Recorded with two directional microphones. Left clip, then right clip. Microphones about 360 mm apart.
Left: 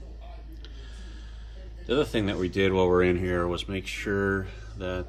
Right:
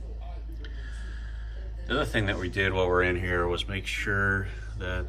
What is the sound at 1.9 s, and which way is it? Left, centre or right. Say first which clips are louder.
Speech: left 2 dB; centre.